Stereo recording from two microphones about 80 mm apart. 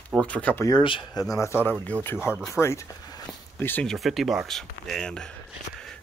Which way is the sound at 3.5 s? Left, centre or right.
Left.